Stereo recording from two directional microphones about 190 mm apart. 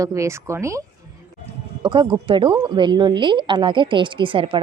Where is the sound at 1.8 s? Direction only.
25° right (ahead or behind).